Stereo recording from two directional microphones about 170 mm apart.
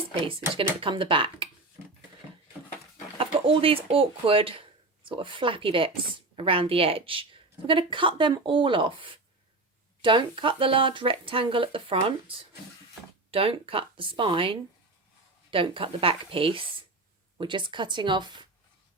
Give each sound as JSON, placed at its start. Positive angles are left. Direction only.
{"t": 0.3, "sound": "speech", "side_deg": -30}
{"t": 3.4, "sound": "a woman's voice", "side_deg": -30}